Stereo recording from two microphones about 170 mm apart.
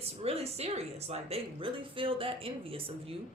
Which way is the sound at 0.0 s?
35° right (ahead or behind).